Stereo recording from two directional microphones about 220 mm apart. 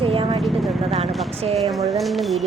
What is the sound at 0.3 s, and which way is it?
Vehicle, centre (ahead or behind).